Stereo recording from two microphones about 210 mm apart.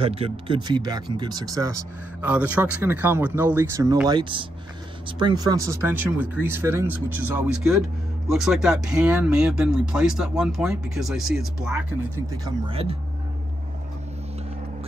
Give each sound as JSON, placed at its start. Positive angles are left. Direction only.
{"t": 0.0, "sound": "speech", "side_deg": -25}
{"t": 12.4, "sound": "speech", "side_deg": -25}